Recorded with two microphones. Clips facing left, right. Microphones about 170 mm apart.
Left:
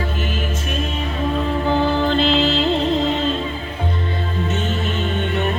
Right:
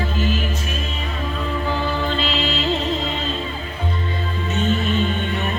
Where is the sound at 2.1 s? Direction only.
55° left (ahead or behind).